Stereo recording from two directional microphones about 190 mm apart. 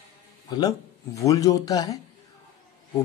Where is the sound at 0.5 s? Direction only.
20° left (ahead or behind).